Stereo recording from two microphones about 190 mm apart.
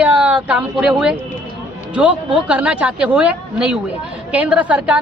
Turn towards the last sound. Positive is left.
turn(degrees=-5)  # may be behind; listen again after turning